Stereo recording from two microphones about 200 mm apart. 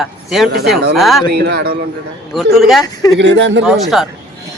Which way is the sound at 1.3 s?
55° right (ahead or behind).